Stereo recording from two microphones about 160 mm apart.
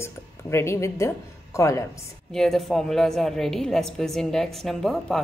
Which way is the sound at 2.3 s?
Centre (ahead or behind).